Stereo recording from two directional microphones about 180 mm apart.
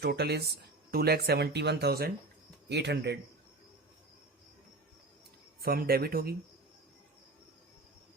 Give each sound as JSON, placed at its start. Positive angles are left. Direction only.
{"t": 0.0, "sound": "speech", "side_deg": -65}
{"t": 5.6, "sound": "speech", "side_deg": -55}